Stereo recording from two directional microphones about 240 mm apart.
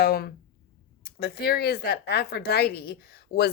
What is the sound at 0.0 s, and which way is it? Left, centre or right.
Speech, left.